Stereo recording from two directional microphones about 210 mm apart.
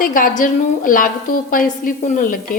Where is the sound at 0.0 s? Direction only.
40° left (ahead or behind).